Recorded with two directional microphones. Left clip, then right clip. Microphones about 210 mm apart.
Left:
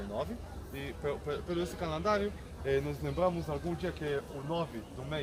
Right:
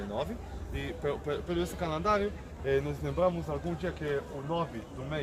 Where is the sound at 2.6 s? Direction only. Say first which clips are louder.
Right 2 dB; centre (ahead or behind).